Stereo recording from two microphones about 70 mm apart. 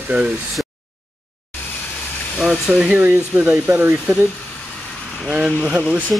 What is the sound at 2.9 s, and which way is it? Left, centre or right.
Speech, right.